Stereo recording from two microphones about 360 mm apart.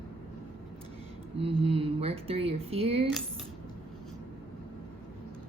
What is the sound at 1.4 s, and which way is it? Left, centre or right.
Speech, centre.